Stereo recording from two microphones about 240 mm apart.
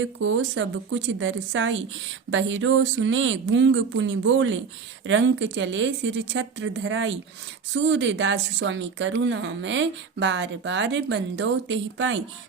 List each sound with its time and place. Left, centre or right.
0.0 s speech: right